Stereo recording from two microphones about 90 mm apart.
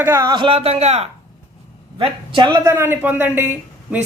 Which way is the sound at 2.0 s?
60° right (ahead or behind).